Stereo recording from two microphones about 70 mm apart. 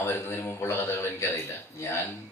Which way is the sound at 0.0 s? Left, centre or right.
Left.